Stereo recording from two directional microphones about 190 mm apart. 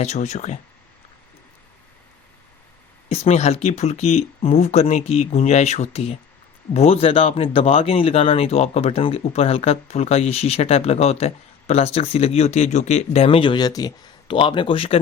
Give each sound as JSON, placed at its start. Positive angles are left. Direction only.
{"t": 0.0, "sound": "speech", "side_deg": 35}
{"t": 3.1, "sound": "speech", "side_deg": 35}